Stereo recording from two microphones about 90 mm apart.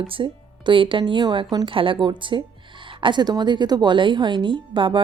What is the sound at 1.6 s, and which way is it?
Speech, 75° right (ahead or behind).